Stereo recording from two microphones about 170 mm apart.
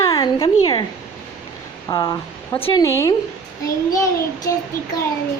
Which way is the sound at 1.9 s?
20° left (ahead or behind).